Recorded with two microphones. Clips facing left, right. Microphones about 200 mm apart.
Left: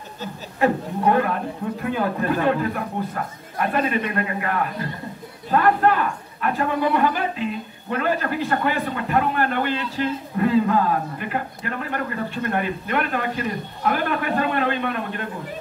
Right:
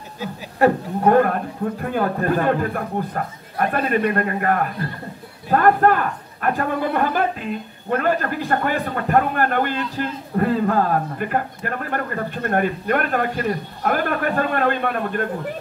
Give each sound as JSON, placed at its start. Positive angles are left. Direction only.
{"t": 0.6, "sound": "a man's voice", "side_deg": -50}